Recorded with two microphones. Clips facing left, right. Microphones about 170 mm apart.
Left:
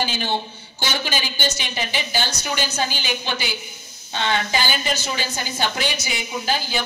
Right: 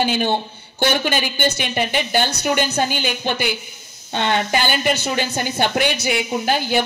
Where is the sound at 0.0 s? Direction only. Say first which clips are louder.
Right 5 dB; 55° right (ahead or behind).